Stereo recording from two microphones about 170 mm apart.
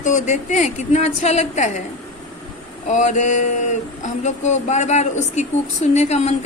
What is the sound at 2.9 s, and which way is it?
A woman's voice, 45° left (ahead or behind).